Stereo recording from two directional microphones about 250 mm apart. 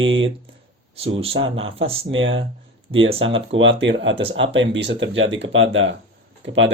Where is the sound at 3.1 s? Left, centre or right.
Right.